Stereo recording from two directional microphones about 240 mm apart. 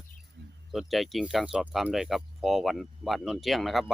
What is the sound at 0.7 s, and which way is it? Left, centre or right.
Speech, centre.